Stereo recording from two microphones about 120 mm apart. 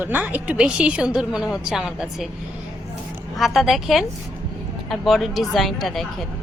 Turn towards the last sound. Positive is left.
turn(degrees=0)  # may be behind; listen again after turning